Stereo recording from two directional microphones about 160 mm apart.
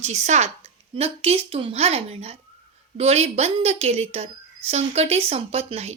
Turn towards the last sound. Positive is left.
turn(degrees=-40)  # may be behind; listen again after turning